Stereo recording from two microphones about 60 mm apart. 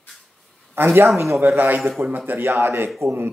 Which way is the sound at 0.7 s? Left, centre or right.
Right.